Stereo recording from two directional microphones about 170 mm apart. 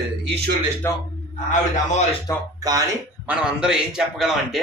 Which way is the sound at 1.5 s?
45° left (ahead or behind).